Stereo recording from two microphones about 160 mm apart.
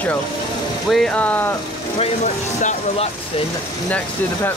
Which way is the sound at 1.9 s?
50° left (ahead or behind).